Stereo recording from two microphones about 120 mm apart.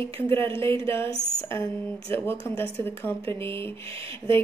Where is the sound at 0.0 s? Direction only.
20° left (ahead or behind).